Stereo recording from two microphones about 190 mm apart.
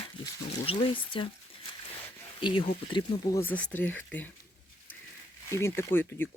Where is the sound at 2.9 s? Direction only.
15° left (ahead or behind).